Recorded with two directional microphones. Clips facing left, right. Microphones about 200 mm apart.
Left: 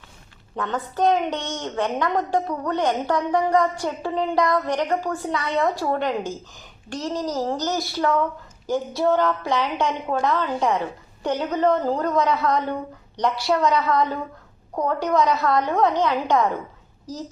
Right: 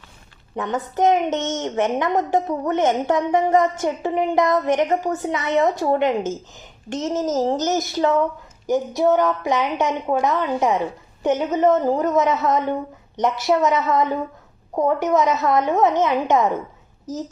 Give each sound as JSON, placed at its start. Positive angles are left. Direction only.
{"t": 0.5, "sound": "a woman's voice", "side_deg": -20}